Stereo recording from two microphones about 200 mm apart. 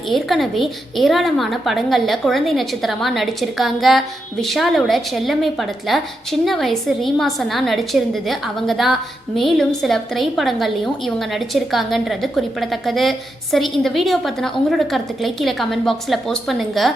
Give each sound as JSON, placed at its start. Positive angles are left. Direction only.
{"t": 0.1, "sound": "a woman's voice", "side_deg": 0}